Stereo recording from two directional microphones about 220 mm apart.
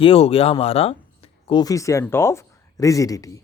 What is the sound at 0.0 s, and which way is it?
Speech, 25° left (ahead or behind).